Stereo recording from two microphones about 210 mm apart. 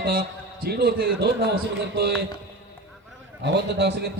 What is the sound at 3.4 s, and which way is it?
Speech, 55° right (ahead or behind).